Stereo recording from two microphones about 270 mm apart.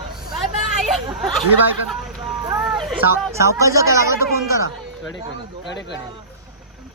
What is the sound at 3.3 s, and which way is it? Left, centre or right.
Speech, centre.